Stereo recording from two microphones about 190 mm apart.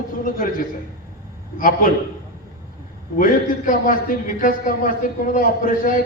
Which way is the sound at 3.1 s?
45° left (ahead or behind).